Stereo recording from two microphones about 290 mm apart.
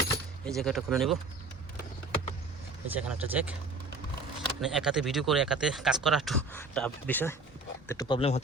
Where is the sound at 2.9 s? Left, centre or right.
Centre.